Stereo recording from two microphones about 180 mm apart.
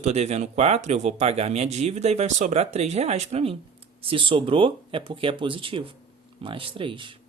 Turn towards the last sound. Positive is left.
turn(degrees=-30)  # may be behind; listen again after turning